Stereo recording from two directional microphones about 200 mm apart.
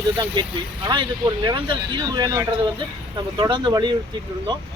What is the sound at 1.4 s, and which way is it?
Speech, 20° right (ahead or behind).